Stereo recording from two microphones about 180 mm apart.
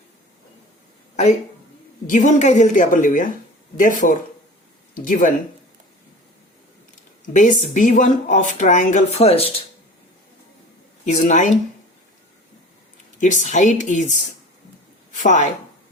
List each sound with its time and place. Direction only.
2.0 s speech: 40° left (ahead or behind)
7.3 s speech: 45° left (ahead or behind)
11.0 s speech: 45° left (ahead or behind)
13.1 s a woman's voice: 45° left (ahead or behind)